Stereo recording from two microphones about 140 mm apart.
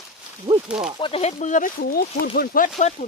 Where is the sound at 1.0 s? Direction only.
45° left (ahead or behind); by 2.7 s 80° left.